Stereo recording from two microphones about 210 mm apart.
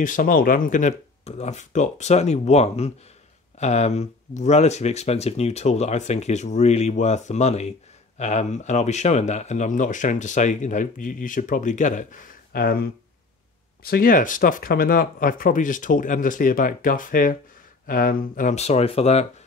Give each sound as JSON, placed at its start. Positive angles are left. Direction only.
{"t": 0.0, "sound": "speech", "side_deg": 40}
{"t": 13.8, "sound": "speech", "side_deg": 45}